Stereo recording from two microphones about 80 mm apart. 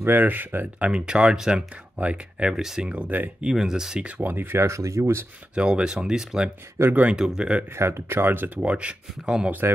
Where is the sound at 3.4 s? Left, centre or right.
Centre; by 5.3 s right.